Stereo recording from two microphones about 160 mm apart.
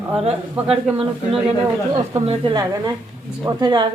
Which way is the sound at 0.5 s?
10° right (ahead or behind).